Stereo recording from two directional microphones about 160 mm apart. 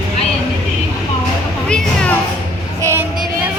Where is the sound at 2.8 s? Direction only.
15° right (ahead or behind).